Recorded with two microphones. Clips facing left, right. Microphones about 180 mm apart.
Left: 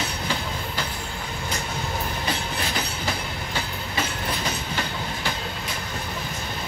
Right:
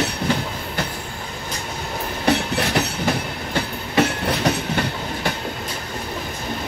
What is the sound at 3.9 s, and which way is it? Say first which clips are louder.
Train: right 10 dB; 70° right (ahead or behind).